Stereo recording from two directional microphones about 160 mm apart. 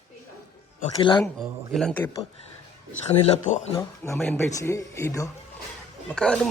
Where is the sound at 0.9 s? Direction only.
30° left (ahead or behind).